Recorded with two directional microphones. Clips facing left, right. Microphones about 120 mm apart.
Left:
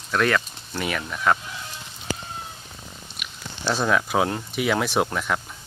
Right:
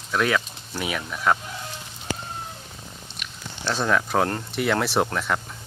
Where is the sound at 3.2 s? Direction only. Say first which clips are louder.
Left 1 dB; 5° left (ahead or behind).